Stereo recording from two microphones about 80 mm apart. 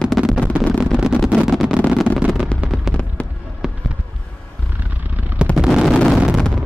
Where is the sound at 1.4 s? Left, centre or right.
Centre.